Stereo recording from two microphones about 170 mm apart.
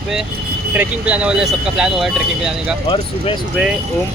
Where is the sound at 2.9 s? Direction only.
30° left (ahead or behind).